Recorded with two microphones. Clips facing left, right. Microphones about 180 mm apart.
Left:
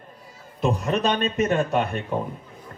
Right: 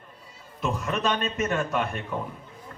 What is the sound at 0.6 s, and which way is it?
Speech, 25° left (ahead or behind).